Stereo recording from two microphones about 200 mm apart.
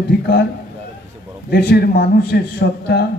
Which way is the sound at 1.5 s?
55° left (ahead or behind).